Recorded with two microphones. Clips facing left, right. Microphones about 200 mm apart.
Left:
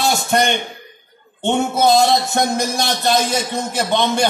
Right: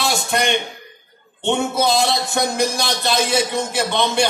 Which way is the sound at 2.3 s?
45° left (ahead or behind).